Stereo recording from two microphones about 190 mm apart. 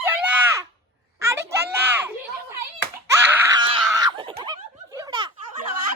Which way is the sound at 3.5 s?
25° right (ahead or behind).